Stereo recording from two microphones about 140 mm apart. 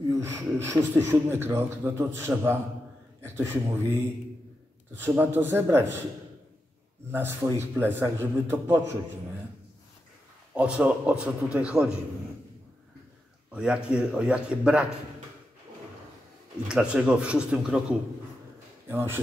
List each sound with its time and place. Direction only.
0.1 s a man's voice: 20° right (ahead or behind)
5.0 s a man's voice: 15° right (ahead or behind)
7.1 s a man's voice: 15° right (ahead or behind)
10.5 s a man's voice: 5° right (ahead or behind)
13.5 s a man's voice: 5° right (ahead or behind)
16.6 s a man's voice: 5° right (ahead or behind)
18.9 s a man's voice: 15° right (ahead or behind)